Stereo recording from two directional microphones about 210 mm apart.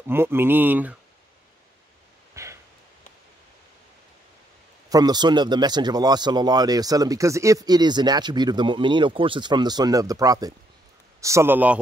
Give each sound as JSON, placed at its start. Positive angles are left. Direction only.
{"t": 0.0, "sound": "speech", "side_deg": -10}
{"t": 2.3, "sound": "a sound", "side_deg": -15}
{"t": 4.8, "sound": "speech", "side_deg": -20}